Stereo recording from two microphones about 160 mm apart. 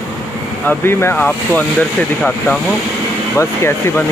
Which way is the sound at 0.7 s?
15° left (ahead or behind).